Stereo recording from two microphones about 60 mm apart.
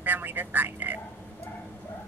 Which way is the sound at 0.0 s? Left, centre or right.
Right.